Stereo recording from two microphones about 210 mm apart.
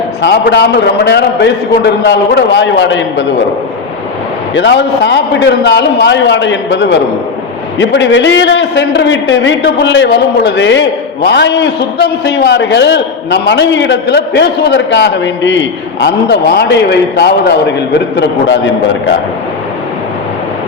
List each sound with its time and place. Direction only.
0.2 s a man's voice: 55° left (ahead or behind)
4.5 s a man's voice: 55° left (ahead or behind)